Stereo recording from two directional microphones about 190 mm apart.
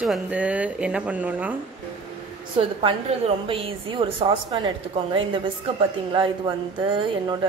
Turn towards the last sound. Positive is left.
turn(degrees=-25)  # may be behind; listen again after turning